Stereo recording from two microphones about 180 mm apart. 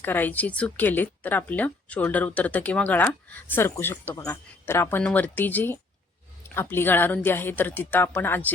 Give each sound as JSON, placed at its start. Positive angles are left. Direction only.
{"t": 0.0, "sound": "speech", "side_deg": 10}